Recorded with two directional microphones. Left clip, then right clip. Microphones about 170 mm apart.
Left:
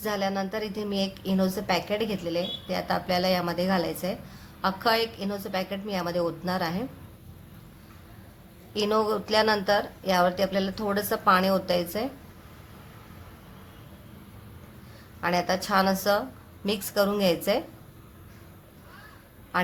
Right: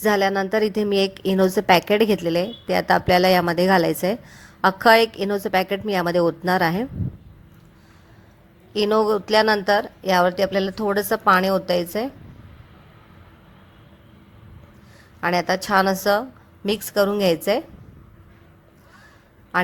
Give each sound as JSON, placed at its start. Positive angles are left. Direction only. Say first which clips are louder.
{"t": 0.0, "sound": "a woman's voice", "louder": "right 9 dB", "side_deg": -45}
{"t": 8.7, "sound": "a woman's voice", "louder": "right 6 dB", "side_deg": -40}
{"t": 15.2, "sound": "a woman's voice", "louder": "right 5 dB", "side_deg": -45}